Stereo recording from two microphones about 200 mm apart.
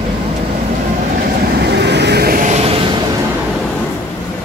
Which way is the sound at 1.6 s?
60° right (ahead or behind).